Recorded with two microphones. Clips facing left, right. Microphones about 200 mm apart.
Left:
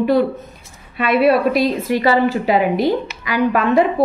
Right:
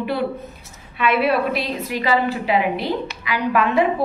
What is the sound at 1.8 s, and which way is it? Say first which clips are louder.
A woman's voice: left 5 dB; 45° left (ahead or behind).